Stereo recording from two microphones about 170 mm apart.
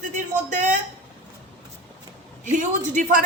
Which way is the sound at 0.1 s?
45° right (ahead or behind).